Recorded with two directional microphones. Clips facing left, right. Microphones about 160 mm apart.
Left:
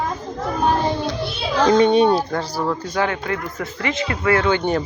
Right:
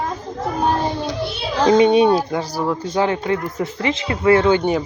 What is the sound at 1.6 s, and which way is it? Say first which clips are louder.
Speech: right 1 dB; 15° right (ahead or behind).